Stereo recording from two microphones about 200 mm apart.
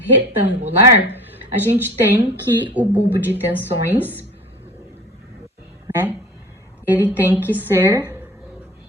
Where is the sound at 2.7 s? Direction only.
10° right (ahead or behind).